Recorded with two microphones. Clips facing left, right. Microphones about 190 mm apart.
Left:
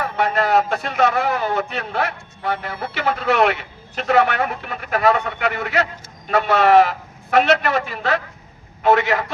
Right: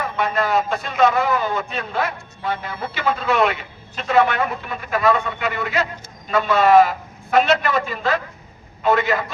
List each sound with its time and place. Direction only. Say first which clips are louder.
0.0 s a man's voice: left 2 dB; 70° left (ahead or behind)